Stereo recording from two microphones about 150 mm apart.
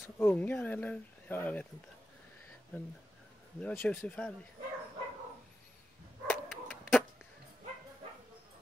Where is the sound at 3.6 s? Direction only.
10° left (ahead or behind).